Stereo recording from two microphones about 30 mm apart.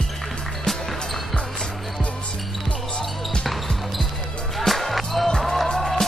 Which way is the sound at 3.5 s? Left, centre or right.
Centre.